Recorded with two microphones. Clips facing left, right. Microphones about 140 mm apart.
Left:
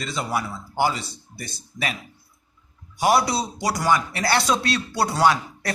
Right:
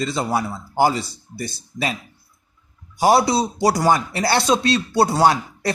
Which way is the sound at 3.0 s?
30° right (ahead or behind).